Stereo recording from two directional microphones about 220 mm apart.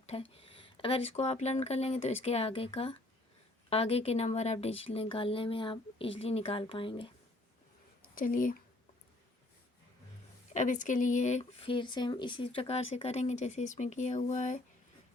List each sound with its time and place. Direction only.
0.0 s a woman's voice: 30° left (ahead or behind)
8.1 s speech: 40° left (ahead or behind)
10.5 s speech: 35° left (ahead or behind)